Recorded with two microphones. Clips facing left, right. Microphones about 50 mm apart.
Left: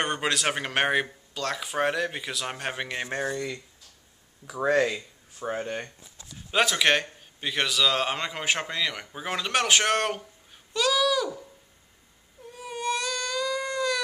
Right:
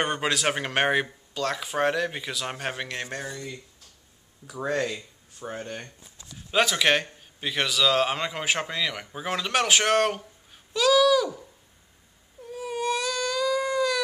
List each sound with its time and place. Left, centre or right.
0.0 s a man's voice: centre
3.1 s speech: left
4.5 s speech: centre
6.5 s a man's voice: centre
12.4 s baby cry: centre